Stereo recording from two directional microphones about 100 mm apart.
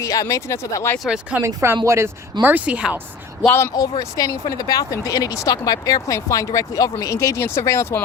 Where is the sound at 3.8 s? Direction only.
35° left (ahead or behind).